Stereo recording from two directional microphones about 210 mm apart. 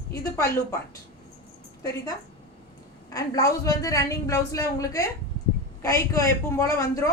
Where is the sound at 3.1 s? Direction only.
15° left (ahead or behind).